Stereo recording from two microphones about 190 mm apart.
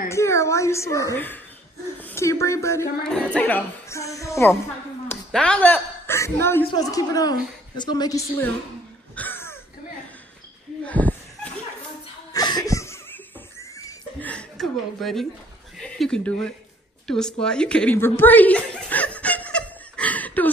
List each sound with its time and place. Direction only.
0.1 s speech: 15° left (ahead or behind)
5.1 s a woman's voice: 5° left (ahead or behind); by 8.2 s 20° left (ahead or behind)
9.1 s throat clearing: 10° left (ahead or behind)
10.9 s a sound: 10° left (ahead or behind)
12.3 s laughter: 20° left (ahead or behind)
14.3 s a woman's voice: centre (ahead or behind)
17.1 s chuckle: 5° left (ahead or behind)